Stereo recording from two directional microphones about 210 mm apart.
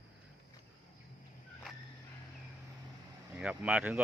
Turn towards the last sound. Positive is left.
turn(degrees=-5)  # may be behind; listen again after turning